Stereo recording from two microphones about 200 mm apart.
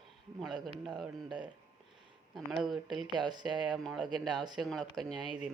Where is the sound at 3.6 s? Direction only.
Centre (ahead or behind).